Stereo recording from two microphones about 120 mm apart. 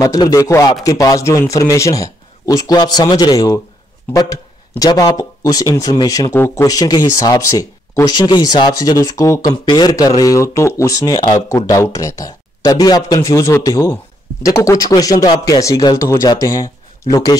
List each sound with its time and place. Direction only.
0.0 s a man's voice: 30° left (ahead or behind)
9.5 s speech: 40° left (ahead or behind)